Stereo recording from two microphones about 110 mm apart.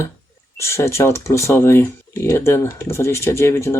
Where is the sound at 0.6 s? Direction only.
25° left (ahead or behind).